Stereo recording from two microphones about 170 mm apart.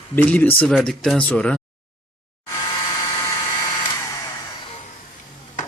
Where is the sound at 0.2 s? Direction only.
10° left (ahead or behind).